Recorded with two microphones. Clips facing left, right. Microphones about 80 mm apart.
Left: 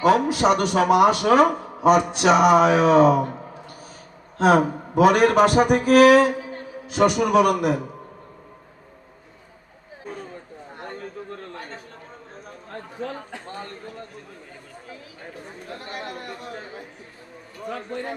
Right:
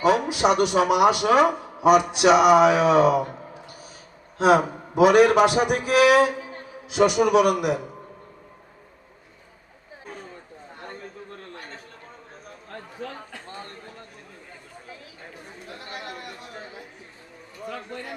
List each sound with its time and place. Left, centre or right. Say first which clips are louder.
0.0 s a man's voice: left 2 dB; left
4.4 s a man's voice: left 1 dB; left
10.8 s a sound: left 5 dB; left
13.0 s a man's voice: left 5 dB; left
15.7 s chatter: left 3 dB; left